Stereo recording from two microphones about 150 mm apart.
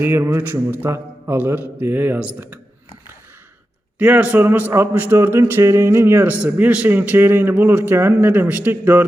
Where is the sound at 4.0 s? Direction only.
10° right (ahead or behind).